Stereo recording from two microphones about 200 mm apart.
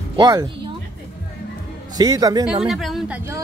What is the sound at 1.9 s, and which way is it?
Speech, 20° right (ahead or behind).